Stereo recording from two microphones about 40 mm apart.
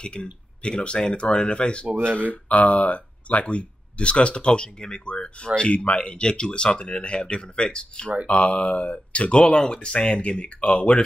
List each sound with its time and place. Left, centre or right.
0.0 s speech: left
2.5 s speech: left